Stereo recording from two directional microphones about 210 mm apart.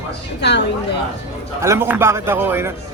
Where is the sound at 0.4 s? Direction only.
55° left (ahead or behind).